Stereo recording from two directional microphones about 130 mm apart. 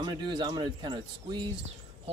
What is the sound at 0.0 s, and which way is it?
Speech, 35° right (ahead or behind).